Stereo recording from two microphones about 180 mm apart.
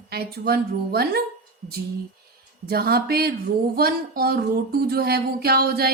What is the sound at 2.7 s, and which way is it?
Speech, 60° right (ahead or behind).